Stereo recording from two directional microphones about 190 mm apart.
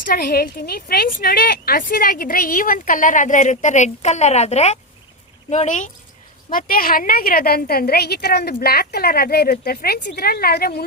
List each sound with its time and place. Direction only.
0.0 s a woman's voice: 50° left (ahead or behind)